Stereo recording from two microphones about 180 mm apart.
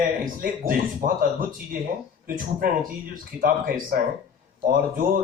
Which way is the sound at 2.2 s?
50° right (ahead or behind).